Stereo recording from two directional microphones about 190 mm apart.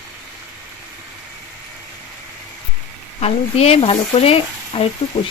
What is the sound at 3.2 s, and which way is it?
Speech, 35° left (ahead or behind).